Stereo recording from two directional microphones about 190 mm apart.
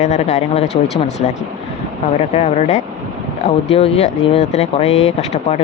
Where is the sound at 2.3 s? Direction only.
35° left (ahead or behind).